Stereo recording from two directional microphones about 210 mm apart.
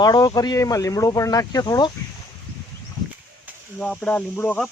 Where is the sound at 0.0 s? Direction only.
20° left (ahead or behind).